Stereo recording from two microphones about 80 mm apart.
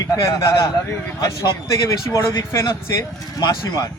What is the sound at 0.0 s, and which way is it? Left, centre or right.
Speech, left.